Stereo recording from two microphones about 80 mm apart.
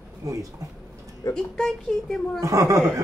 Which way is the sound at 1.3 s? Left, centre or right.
Centre.